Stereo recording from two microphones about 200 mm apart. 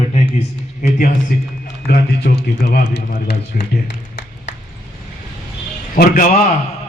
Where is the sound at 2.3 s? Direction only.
45° left (ahead or behind).